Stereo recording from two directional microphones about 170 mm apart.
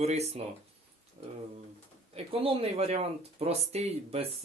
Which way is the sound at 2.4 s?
35° right (ahead or behind).